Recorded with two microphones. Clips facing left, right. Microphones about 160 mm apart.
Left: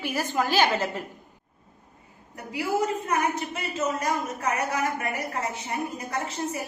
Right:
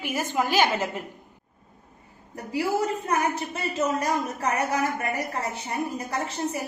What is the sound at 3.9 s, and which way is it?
Speech, 35° right (ahead or behind).